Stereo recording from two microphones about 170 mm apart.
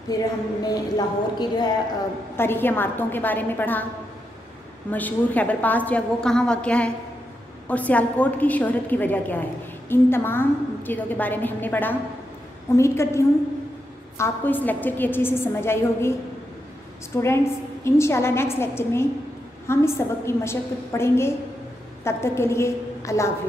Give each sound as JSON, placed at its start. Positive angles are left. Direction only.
{"t": 0.1, "sound": "speech", "side_deg": 20}
{"t": 2.3, "sound": "a woman's voice", "side_deg": 15}
{"t": 4.9, "sound": "a woman's voice", "side_deg": 10}